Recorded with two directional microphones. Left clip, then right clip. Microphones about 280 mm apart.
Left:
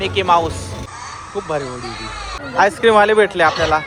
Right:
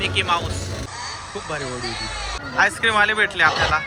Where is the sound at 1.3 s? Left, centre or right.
Centre.